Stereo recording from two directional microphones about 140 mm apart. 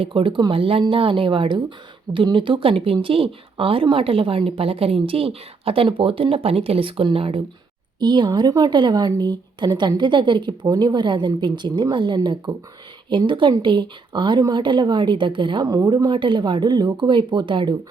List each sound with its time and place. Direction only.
0.0 s speech: 40° right (ahead or behind)